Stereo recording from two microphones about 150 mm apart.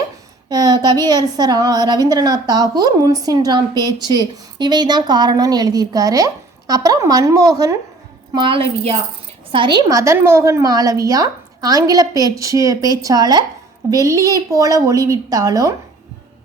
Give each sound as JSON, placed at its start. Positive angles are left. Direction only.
{"t": 0.5, "sound": "a woman's voice", "side_deg": -25}